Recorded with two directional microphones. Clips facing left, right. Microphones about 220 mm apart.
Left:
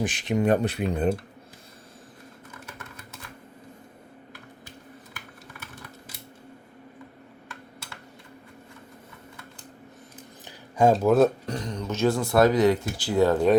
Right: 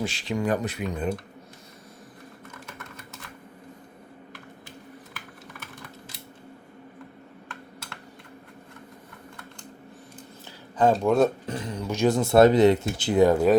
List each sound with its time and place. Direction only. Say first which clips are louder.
0.0 s speech: left 3 dB; 20° left (ahead or behind)
10.8 s speech: left 2 dB; 5° left (ahead or behind)